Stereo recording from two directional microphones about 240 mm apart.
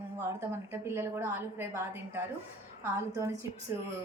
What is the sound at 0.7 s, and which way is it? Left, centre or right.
A woman's voice, centre.